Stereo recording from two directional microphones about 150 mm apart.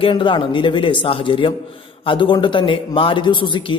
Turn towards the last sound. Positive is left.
turn(degrees=35)  # may be behind; listen again after turning